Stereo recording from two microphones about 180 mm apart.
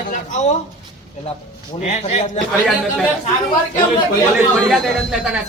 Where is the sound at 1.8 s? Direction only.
40° left (ahead or behind).